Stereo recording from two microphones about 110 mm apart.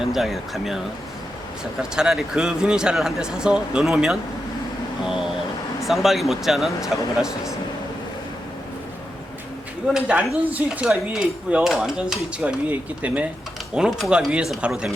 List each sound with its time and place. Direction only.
0.0 s speech: centre (ahead or behind)
1.8 s speech: 5° right (ahead or behind)
5.8 s speech: centre (ahead or behind)
9.9 s mechanisms: 10° right (ahead or behind)